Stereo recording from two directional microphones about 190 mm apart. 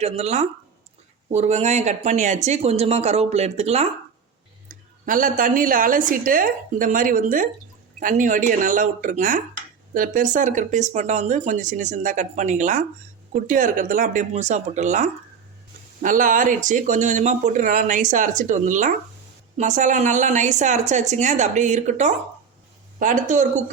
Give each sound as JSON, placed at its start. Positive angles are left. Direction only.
{"t": 0.0, "sound": "speech", "side_deg": -35}
{"t": 4.7, "sound": "a woman's voice", "side_deg": -45}